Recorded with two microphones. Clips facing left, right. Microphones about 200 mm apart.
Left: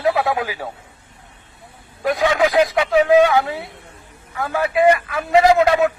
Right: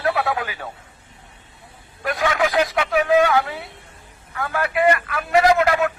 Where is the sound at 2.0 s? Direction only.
15° left (ahead or behind).